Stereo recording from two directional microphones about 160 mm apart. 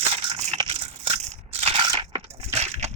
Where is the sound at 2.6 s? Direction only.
45° right (ahead or behind).